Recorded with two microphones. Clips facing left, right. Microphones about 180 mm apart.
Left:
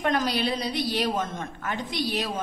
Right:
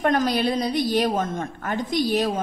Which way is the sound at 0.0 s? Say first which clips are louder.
Right 4 dB; 45° right (ahead or behind).